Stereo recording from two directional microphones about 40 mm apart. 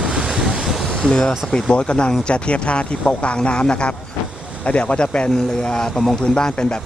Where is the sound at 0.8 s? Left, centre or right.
Centre.